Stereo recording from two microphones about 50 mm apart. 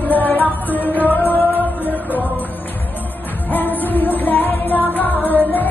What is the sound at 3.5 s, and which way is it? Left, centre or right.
Music, left.